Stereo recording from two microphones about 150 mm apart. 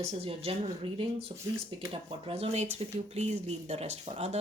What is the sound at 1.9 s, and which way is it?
Speech, 40° right (ahead or behind).